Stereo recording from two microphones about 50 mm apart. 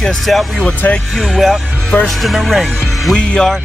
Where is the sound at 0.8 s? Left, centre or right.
Left.